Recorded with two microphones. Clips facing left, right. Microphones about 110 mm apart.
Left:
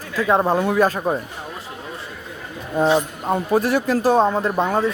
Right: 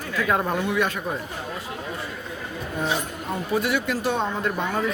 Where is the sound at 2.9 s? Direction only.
45° left (ahead or behind).